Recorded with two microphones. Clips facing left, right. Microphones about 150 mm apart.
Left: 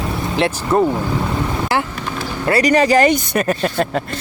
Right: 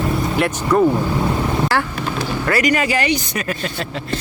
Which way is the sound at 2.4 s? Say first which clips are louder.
Left 5 dB; 35° left (ahead or behind).